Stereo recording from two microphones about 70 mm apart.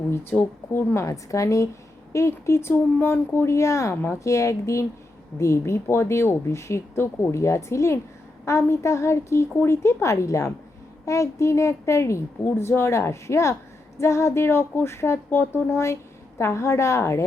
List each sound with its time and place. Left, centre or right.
0.3 s speech: left
1.0 s speech: left